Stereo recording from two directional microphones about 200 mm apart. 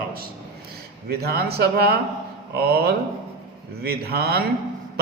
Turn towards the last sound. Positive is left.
turn(degrees=-50)  # may be behind; listen again after turning